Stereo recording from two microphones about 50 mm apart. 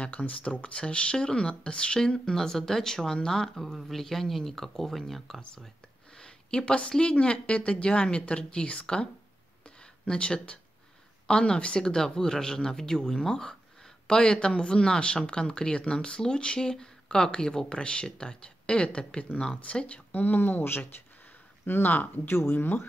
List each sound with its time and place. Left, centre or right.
0.0 s speech: left; by 5.4 s centre
6.1 s speech: centre; by 22.3 s left
22.3 s speech: left